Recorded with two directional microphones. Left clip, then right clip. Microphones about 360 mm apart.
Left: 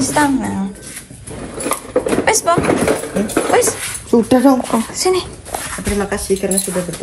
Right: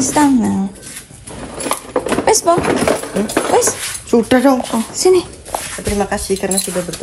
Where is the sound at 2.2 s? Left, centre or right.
Centre.